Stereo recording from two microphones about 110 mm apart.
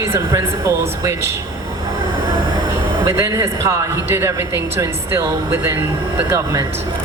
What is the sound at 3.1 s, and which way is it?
Speech, 25° right (ahead or behind).